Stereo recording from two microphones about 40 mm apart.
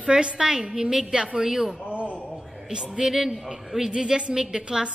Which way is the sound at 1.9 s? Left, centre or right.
Right.